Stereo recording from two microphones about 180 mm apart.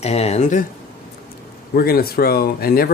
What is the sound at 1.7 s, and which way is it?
Speech, 55° left (ahead or behind).